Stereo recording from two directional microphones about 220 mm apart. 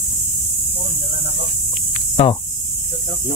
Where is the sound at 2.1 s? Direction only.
25° left (ahead or behind).